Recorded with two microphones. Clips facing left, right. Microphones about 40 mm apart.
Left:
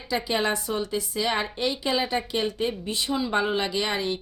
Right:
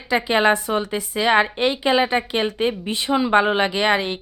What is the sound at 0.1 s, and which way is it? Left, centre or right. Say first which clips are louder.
A woman's voice: right 8 dB; right.